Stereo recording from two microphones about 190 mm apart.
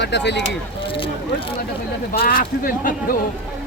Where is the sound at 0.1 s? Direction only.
65° left (ahead or behind).